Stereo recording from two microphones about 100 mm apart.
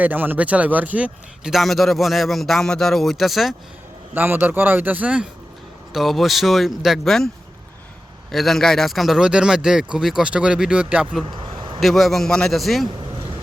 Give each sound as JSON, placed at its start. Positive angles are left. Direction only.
{"t": 0.0, "sound": "speech", "side_deg": -20}
{"t": 1.5, "sound": "a man's voice", "side_deg": 0}
{"t": 4.1, "sound": "a man's voice", "side_deg": -20}
{"t": 8.3, "sound": "a man's voice", "side_deg": 0}
{"t": 11.3, "sound": "vehicle", "side_deg": -55}
{"t": 11.8, "sound": "a man's voice", "side_deg": 0}